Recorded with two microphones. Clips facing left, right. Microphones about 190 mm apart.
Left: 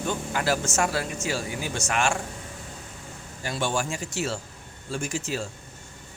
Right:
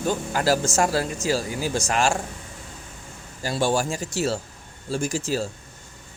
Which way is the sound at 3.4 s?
35° right (ahead or behind).